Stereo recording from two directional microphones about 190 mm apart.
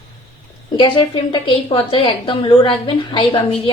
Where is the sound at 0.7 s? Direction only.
25° left (ahead or behind).